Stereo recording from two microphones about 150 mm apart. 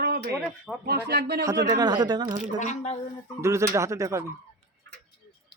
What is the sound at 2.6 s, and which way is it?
Speech, 55° left (ahead or behind).